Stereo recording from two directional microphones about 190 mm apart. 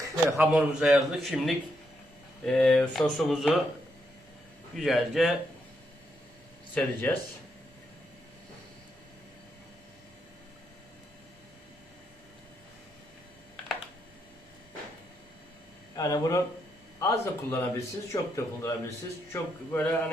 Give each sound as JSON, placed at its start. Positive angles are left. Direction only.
{"t": 0.0, "sound": "a man's voice", "side_deg": -15}
{"t": 0.5, "sound": "speech", "side_deg": -5}
{"t": 4.7, "sound": "speech", "side_deg": 0}
{"t": 6.7, "sound": "a man's voice", "side_deg": 10}
{"t": 16.0, "sound": "a man's voice", "side_deg": 20}